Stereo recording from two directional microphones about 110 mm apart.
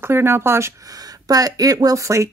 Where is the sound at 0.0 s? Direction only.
20° right (ahead or behind).